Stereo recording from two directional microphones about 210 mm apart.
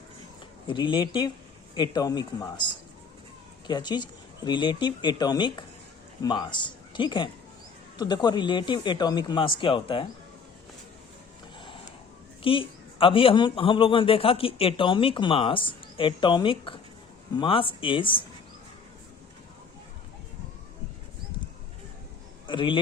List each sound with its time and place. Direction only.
0.7 s a man's voice: 20° left (ahead or behind)
12.4 s a man's voice: 25° left (ahead or behind)
22.4 s a man's voice: 25° left (ahead or behind)